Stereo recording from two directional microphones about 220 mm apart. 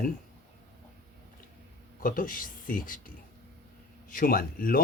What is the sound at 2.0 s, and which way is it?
Speech, 40° left (ahead or behind).